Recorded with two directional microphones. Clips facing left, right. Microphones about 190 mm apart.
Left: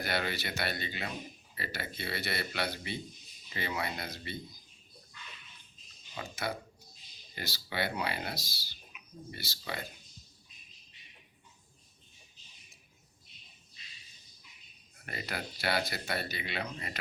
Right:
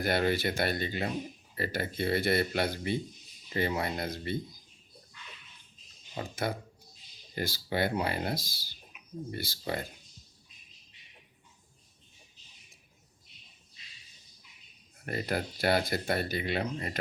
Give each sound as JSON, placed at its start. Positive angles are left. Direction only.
{"t": 0.0, "sound": "speech", "side_deg": -50}
{"t": 6.1, "sound": "speech", "side_deg": -50}
{"t": 15.0, "sound": "speech", "side_deg": -45}